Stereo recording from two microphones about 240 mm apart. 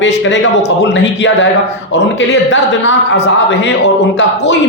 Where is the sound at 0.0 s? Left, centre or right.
Left.